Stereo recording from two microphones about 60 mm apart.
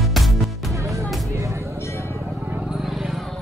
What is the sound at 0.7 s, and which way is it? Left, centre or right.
Music, right.